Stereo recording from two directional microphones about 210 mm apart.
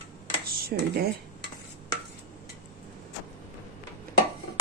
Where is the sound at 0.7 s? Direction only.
50° right (ahead or behind).